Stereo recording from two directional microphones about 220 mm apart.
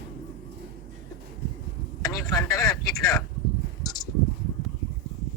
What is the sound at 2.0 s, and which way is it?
Speech, 15° left (ahead or behind).